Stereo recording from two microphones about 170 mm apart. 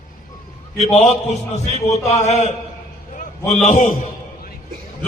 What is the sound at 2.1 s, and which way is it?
A man's voice, 40° left (ahead or behind).